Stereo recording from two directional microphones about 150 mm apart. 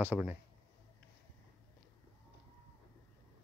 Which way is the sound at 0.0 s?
10° right (ahead or behind).